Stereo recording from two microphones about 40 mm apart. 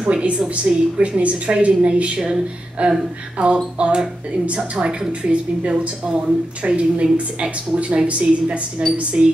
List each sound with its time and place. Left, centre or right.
0.0 s a woman's voice: right